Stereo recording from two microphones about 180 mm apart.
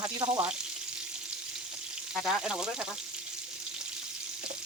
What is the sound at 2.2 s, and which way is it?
Speech, 5° right (ahead or behind).